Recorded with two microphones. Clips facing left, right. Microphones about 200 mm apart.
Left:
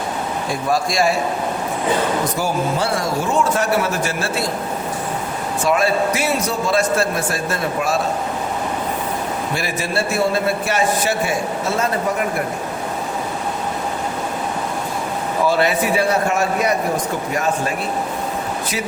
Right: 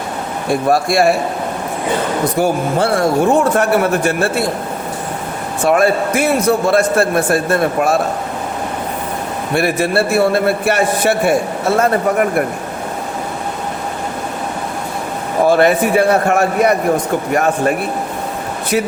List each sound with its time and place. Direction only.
0.5 s a man's voice: 60° right (ahead or behind)
2.3 s a man's voice: 55° right (ahead or behind)
5.6 s a man's voice: 55° right (ahead or behind)
9.6 s a man's voice: 60° right (ahead or behind)
15.4 s a man's voice: 50° right (ahead or behind)